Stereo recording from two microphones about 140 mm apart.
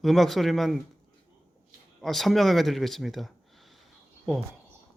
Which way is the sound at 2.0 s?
Centre (ahead or behind).